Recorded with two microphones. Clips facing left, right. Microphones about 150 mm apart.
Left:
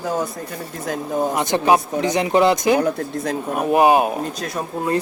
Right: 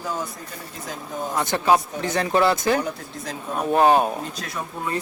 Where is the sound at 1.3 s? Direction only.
20° left (ahead or behind).